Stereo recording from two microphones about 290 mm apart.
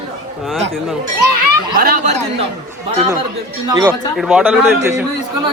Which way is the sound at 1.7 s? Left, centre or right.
Right.